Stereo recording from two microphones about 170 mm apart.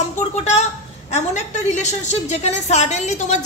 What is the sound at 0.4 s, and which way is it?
A woman's voice, 40° left (ahead or behind).